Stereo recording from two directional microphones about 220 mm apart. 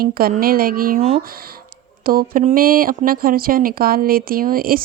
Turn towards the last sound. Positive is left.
turn(degrees=-40)  # may be behind; listen again after turning